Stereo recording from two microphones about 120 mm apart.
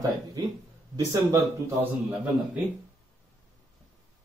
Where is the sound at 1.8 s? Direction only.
10° right (ahead or behind).